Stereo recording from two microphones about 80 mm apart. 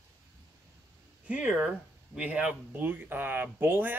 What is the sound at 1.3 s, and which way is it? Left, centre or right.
Speech, centre.